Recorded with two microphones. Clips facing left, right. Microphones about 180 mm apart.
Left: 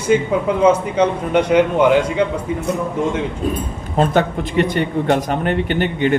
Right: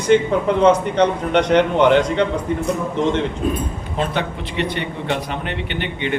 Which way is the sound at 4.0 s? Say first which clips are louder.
Left 7 dB; 45° left (ahead or behind).